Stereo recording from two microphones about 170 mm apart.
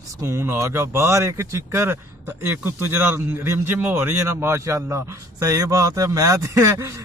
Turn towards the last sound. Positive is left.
turn(degrees=-15)  # may be behind; listen again after turning